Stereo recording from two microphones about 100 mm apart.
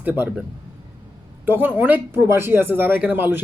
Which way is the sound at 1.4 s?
20° right (ahead or behind).